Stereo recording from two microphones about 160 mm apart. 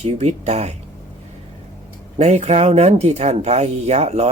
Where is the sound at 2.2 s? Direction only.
45° right (ahead or behind).